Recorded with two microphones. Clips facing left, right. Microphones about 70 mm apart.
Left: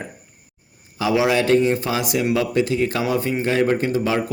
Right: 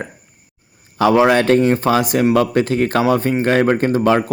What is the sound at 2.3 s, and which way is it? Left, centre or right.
Speech, right.